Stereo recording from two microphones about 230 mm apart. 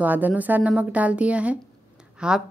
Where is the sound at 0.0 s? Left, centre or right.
Centre.